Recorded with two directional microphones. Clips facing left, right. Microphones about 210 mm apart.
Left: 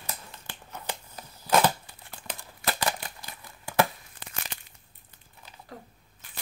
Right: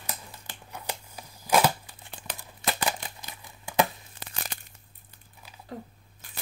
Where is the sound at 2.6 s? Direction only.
20° right (ahead or behind).